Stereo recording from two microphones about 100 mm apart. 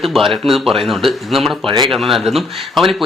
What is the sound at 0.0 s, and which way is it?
Speech, centre (ahead or behind).